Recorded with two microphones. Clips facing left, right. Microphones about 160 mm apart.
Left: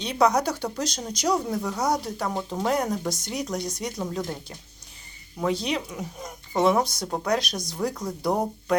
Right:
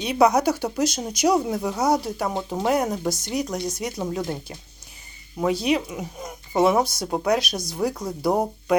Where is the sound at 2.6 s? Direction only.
5° right (ahead or behind).